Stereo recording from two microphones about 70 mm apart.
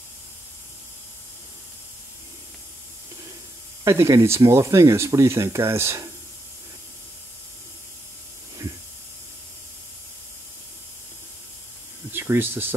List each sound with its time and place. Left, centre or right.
3.8 s speech: right
12.1 s speech: right